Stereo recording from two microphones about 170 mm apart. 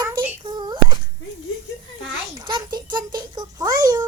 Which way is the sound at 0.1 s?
10° right (ahead or behind).